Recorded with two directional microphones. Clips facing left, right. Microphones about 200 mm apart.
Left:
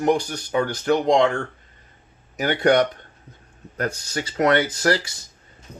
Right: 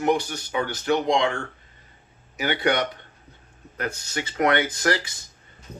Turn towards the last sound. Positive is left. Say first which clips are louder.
# left 3 dB
turn(degrees=35)  # may be behind; listen again after turning